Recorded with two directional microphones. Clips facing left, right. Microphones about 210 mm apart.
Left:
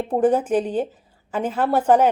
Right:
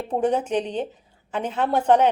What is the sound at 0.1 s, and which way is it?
A woman's voice, 5° left (ahead or behind).